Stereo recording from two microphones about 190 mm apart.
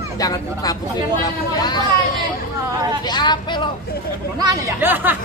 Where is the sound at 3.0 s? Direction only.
20° left (ahead or behind).